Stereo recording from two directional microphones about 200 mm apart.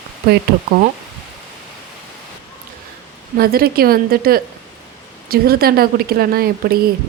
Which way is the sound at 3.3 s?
50° right (ahead or behind).